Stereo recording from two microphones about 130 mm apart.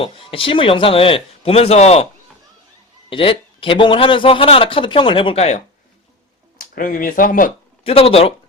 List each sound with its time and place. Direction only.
0.0 s speech: 45° left (ahead or behind)
3.1 s speech: 45° left (ahead or behind)
6.6 s speech: 90° left
7.9 s speech: 50° left (ahead or behind)